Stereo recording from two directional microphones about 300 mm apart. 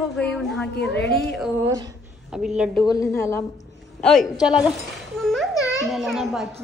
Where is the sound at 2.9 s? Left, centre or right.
Centre.